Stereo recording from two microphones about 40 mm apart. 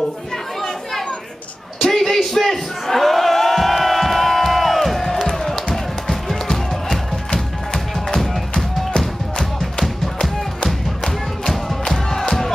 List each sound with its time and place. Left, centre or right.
1.8 s a sound: centre
5.7 s music: centre
11.4 s music: centre